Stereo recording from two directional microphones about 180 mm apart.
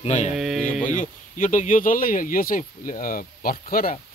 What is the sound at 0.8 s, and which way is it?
Speech, 45° left (ahead or behind).